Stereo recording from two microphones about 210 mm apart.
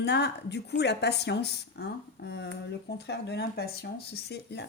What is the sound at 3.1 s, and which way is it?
A woman's voice, 50° left (ahead or behind).